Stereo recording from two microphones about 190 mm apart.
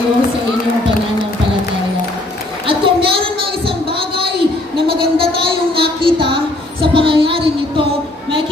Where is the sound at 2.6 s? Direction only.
25° right (ahead or behind).